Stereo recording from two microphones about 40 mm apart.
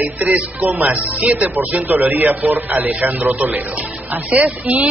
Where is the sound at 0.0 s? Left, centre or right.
Right.